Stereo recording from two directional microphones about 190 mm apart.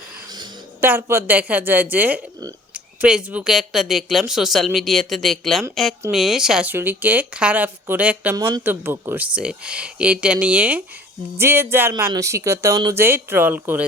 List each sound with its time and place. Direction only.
0.8 s speech: 10° right (ahead or behind)